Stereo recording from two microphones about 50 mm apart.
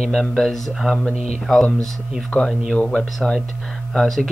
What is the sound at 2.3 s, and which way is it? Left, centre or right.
Speech, left.